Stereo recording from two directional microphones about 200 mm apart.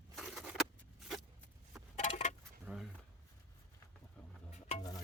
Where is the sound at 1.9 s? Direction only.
35° left (ahead or behind).